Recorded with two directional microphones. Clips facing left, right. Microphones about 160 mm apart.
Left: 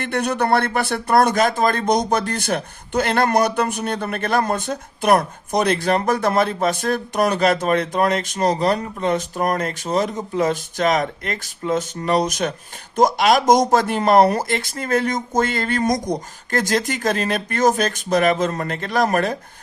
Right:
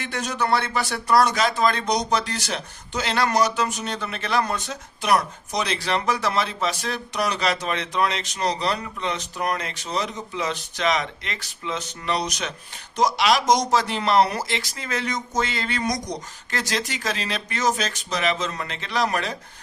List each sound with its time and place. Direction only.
0.0 s speech: 60° left (ahead or behind)